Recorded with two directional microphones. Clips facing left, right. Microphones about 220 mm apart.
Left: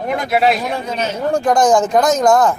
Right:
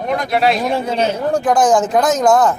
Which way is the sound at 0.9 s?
30° right (ahead or behind).